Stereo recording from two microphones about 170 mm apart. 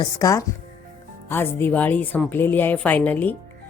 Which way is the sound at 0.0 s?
20° left (ahead or behind).